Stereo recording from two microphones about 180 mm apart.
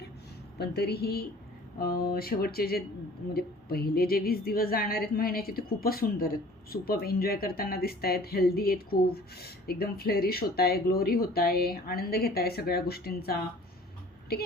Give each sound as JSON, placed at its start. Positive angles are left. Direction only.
{"t": 0.6, "sound": "speech", "side_deg": 65}